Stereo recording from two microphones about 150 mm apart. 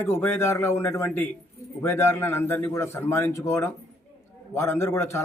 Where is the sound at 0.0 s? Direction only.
15° left (ahead or behind).